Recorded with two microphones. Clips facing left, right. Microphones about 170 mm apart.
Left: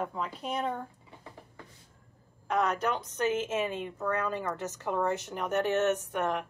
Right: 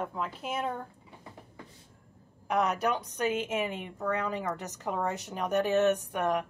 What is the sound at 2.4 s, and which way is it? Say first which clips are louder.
A woman's voice: right 1 dB; 15° right (ahead or behind).